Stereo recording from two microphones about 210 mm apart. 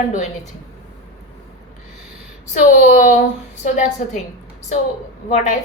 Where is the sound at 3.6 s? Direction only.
35° left (ahead or behind).